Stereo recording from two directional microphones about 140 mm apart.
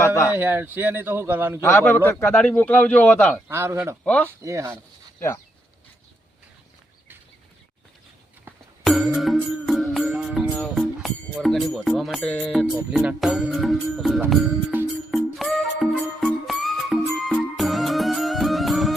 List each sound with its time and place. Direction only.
0.0 s speech: 20° left (ahead or behind)
0.3 s a man's voice: 15° right (ahead or behind)
1.6 s a man's voice: 15° left (ahead or behind)
3.5 s speech: 20° right (ahead or behind)
4.0 s a man's voice: 10° left (ahead or behind)
4.4 s speech: 20° right (ahead or behind)
8.8 s music: centre (ahead or behind)
10.5 s speech: 5° left (ahead or behind)
14.7 s music: 15° right (ahead or behind)
15.1 s music: centre (ahead or behind)